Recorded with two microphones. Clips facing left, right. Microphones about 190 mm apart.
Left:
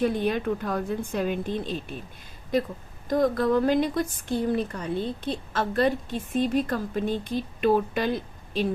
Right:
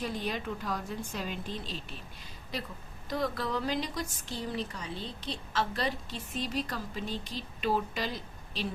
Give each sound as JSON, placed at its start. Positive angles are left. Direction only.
{"t": 0.0, "sound": "a woman's voice", "side_deg": 55}
{"t": 3.1, "sound": "speech", "side_deg": 50}